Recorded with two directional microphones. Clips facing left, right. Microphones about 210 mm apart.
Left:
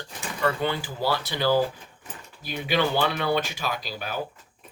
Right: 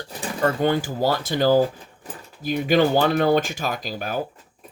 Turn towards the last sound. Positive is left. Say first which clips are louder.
# right 4 dB
turn(degrees=-45)  # may be behind; listen again after turning